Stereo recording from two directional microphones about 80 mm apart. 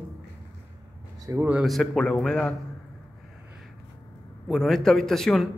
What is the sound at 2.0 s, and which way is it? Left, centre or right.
Speech, centre.